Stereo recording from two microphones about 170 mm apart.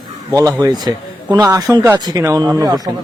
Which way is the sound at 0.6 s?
25° right (ahead or behind).